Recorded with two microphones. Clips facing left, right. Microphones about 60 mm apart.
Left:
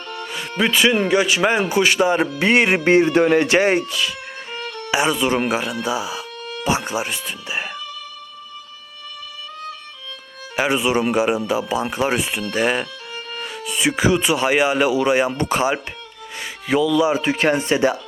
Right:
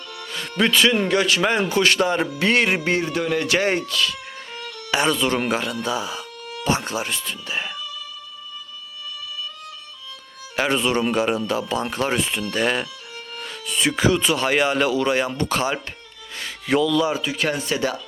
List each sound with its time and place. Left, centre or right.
0.3 s speech: centre
4.5 s music: left
4.9 s speech: centre
10.6 s speech: centre
12.8 s music: left
13.4 s speech: centre
16.6 s speech: centre
17.2 s speech: left